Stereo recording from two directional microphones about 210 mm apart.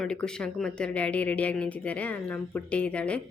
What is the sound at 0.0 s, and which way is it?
Speech, 5° left (ahead or behind).